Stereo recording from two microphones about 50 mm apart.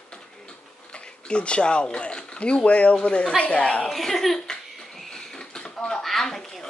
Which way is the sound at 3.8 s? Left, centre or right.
Centre.